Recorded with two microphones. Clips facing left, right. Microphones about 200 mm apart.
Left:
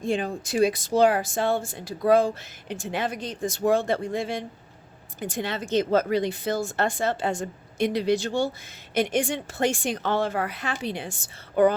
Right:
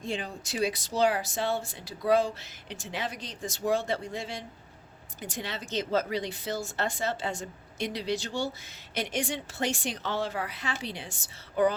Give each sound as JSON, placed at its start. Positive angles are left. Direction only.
{"t": 0.0, "sound": "speech", "side_deg": 50}